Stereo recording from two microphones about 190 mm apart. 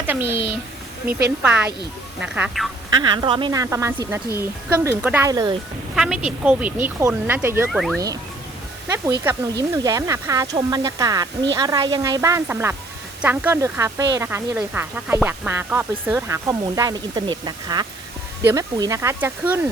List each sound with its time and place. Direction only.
0.1 s speech: 10° right (ahead or behind)
3.0 s speech: 25° right (ahead or behind)
6.0 s speech: 5° right (ahead or behind)
7.7 s speech: centre (ahead or behind)
9.7 s speech: 15° right (ahead or behind)